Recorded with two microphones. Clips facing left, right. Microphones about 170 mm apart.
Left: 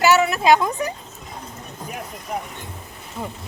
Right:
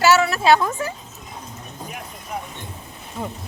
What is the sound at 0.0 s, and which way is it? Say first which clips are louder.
Speech: even; 15° left (ahead or behind).